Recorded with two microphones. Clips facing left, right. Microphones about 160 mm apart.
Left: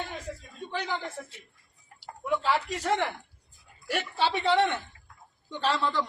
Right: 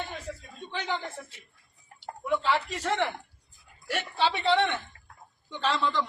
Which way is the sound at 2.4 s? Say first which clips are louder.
Even; 10° left (ahead or behind).